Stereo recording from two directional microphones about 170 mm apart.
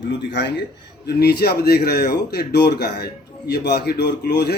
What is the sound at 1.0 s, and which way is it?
A man's voice, 70° left (ahead or behind).